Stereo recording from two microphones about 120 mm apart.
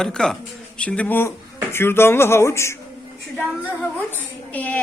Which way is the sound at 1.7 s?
20° left (ahead or behind).